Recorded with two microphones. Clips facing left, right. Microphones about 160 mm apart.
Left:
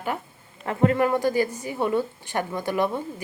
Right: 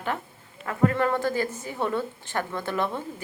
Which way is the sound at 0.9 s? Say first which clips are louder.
Left 3 dB; 15° left (ahead or behind).